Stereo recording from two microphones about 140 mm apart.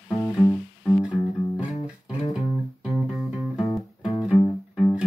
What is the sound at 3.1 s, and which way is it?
Music, 5° right (ahead or behind).